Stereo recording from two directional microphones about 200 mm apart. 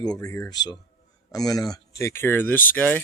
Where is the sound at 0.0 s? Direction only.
20° left (ahead or behind).